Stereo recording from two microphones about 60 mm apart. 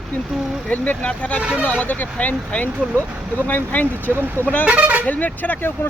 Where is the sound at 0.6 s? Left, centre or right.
Left.